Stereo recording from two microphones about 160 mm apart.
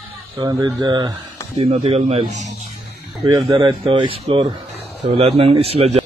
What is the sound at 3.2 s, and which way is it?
A man's voice, 30° right (ahead or behind).